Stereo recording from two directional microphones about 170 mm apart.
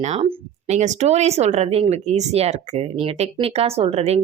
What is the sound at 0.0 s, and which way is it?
Speech, 40° right (ahead or behind).